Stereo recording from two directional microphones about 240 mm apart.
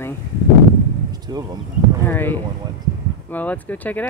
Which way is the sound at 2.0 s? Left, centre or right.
Centre.